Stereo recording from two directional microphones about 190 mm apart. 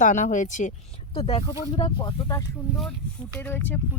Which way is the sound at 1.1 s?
30° left (ahead or behind).